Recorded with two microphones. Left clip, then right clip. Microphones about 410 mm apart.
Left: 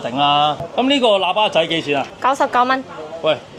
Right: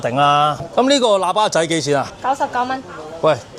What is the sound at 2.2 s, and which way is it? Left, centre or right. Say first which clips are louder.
Speech: left 3 dB; left.